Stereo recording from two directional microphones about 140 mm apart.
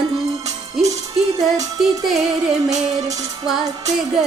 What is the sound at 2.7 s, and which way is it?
Music, 25° right (ahead or behind).